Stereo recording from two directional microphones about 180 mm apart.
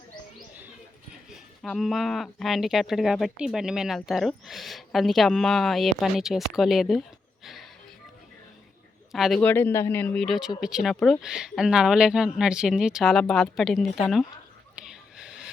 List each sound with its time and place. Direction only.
1.1 s speech: 5° right (ahead or behind)
7.4 s music: centre (ahead or behind)
9.1 s a man's voice: centre (ahead or behind)
9.4 s speech: 10° left (ahead or behind)
14.8 s a sound: 5° right (ahead or behind)